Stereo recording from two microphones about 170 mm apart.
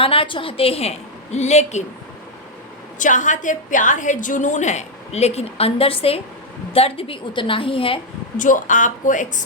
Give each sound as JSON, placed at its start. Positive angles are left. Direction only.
{"t": 0.0, "sound": "a woman's voice", "side_deg": 30}
{"t": 3.0, "sound": "a woman's voice", "side_deg": 50}
{"t": 8.4, "sound": "a woman's voice", "side_deg": 50}